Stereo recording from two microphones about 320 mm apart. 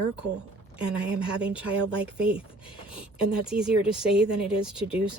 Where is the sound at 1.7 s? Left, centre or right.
Right.